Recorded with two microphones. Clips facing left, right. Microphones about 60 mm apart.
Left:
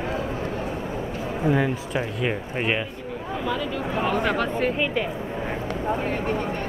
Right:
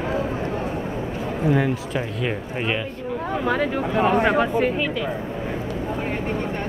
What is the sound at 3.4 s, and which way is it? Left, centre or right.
Speech, right.